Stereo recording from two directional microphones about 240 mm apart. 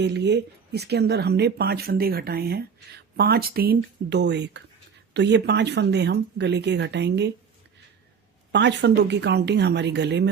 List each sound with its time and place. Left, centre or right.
0.0 s speech: right
8.5 s speech: right